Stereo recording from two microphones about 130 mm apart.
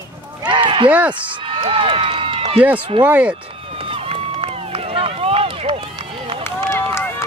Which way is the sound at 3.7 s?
45° right (ahead or behind).